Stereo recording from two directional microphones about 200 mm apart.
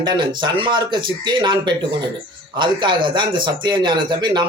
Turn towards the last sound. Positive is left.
turn(degrees=-20)  # may be behind; listen again after turning